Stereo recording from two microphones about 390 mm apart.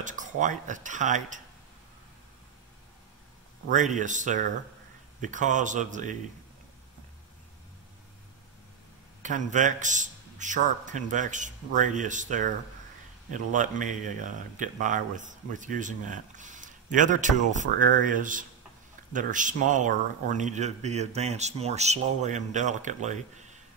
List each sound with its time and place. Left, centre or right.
0.0 s speech: centre
3.7 s speech: centre
9.2 s speech: centre